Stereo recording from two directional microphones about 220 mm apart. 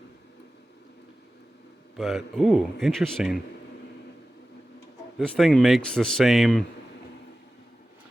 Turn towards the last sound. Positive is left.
turn(degrees=0)  # may be behind; listen again after turning